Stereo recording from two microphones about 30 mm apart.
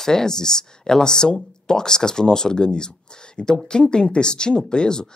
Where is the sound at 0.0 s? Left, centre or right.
Left.